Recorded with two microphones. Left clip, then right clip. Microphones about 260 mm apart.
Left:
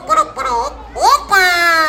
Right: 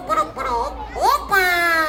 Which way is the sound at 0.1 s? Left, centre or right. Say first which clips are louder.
Left 6 dB; left.